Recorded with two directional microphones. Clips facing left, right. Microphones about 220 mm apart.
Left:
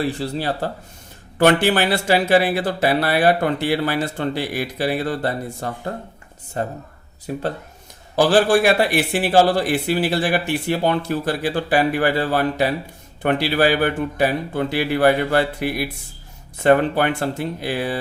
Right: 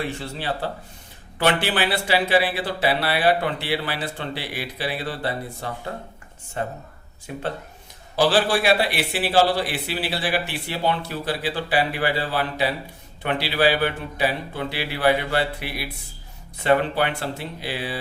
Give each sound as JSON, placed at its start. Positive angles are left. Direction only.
{"t": 0.0, "sound": "a man's voice", "side_deg": 35}